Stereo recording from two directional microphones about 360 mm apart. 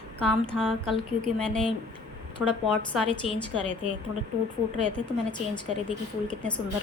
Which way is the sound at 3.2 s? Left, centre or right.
Centre.